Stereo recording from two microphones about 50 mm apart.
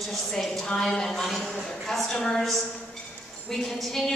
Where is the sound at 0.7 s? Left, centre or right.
Centre.